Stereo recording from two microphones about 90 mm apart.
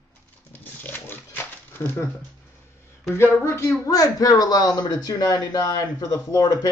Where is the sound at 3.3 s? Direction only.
35° left (ahead or behind).